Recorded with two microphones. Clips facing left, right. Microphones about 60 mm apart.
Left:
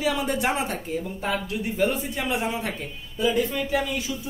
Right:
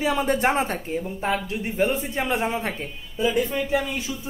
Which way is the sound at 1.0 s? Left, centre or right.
Right.